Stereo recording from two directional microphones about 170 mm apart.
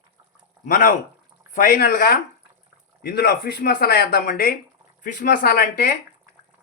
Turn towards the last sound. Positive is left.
turn(degrees=55)  # may be behind; listen again after turning